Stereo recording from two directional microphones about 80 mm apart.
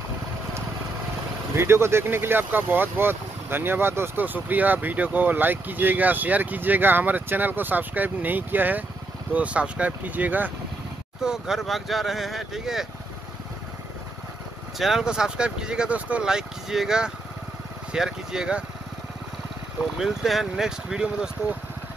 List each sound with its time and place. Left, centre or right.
1.5 s speech: right
11.2 s speech: centre
14.8 s speech: centre
20.0 s speech: centre